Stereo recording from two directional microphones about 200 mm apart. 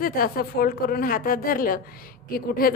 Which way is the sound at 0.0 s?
45° left (ahead or behind).